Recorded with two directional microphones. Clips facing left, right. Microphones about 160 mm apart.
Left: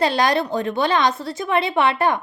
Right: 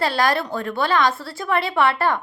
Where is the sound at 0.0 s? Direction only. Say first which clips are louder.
Left 2 dB; 20° left (ahead or behind).